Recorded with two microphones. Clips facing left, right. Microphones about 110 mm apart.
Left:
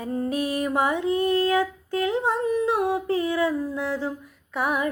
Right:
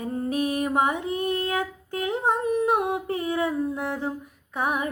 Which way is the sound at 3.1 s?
25° right (ahead or behind).